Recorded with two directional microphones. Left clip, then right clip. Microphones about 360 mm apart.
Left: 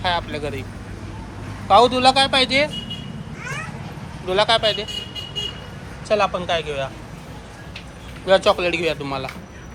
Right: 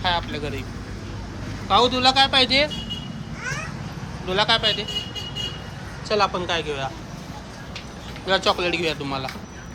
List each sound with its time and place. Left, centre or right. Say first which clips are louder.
0.0 s speech: left 1 dB; centre
1.6 s speech: left 4 dB; centre
4.3 s speech: left 3 dB; centre
6.1 s speech: left 2 dB; centre
8.3 s speech: left 4 dB; centre